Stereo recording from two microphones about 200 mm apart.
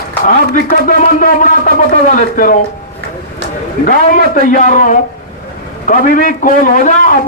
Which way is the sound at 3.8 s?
45° left (ahead or behind).